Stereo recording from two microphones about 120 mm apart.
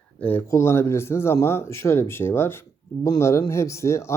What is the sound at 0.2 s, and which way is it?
Speech, 15° left (ahead or behind).